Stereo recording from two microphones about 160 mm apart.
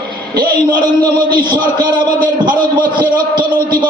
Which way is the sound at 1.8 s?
60° right (ahead or behind).